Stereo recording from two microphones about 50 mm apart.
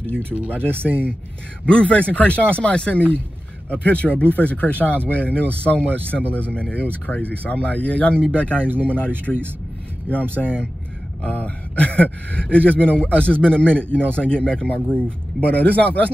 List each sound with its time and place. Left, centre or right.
0.7 s speech: right
1.7 s a man's voice: left
8.5 s speech: right
8.8 s a man's voice: left
10.3 s a man's voice: left